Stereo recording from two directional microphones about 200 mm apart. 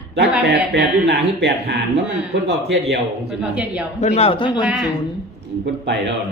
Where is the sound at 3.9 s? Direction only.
35° left (ahead or behind).